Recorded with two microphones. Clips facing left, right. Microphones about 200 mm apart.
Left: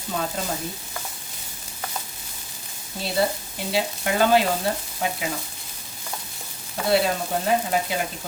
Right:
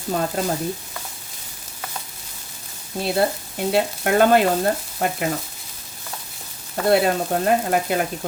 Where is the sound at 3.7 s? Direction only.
55° right (ahead or behind).